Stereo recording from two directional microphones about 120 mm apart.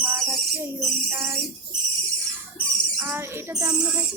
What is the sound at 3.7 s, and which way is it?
Speech, 10° right (ahead or behind).